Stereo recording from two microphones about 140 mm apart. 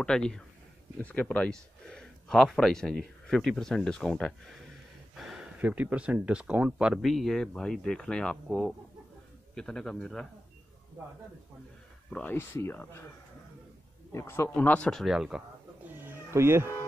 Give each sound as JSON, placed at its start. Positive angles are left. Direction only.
{"t": 0.0, "sound": "speech", "side_deg": 5}
{"t": 11.0, "sound": "speech", "side_deg": -15}
{"t": 12.1, "sound": "speech", "side_deg": 10}
{"t": 14.1, "sound": "speech", "side_deg": 20}
{"t": 16.0, "sound": "a sound", "side_deg": -15}